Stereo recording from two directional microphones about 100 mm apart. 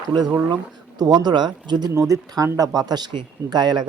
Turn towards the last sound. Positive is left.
turn(degrees=-45)  # may be behind; listen again after turning